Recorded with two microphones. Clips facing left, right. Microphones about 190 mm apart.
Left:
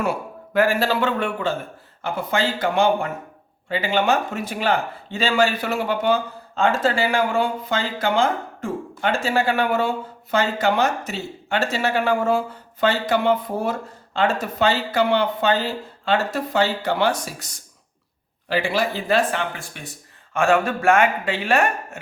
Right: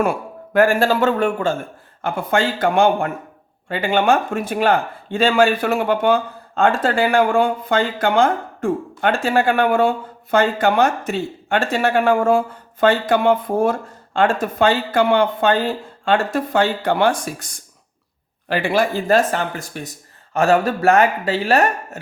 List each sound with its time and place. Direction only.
0.0 s speech: 50° right (ahead or behind)